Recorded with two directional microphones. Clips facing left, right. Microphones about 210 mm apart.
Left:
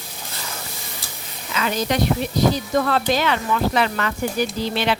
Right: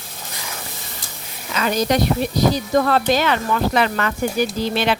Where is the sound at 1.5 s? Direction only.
40° right (ahead or behind).